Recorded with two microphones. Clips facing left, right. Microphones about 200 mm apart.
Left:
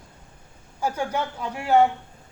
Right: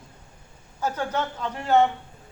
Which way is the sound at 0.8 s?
10° left (ahead or behind).